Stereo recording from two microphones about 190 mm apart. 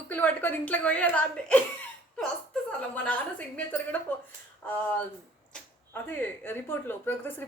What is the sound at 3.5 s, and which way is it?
Speech, 10° left (ahead or behind).